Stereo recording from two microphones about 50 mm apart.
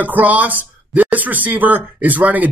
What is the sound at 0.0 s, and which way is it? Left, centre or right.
Speech, right.